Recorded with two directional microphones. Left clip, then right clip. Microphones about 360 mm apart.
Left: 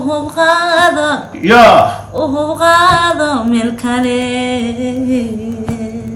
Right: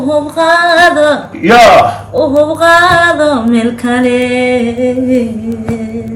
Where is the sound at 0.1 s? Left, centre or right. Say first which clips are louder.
Right 3 dB; centre.